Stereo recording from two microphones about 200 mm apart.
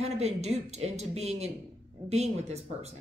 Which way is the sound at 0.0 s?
35° right (ahead or behind).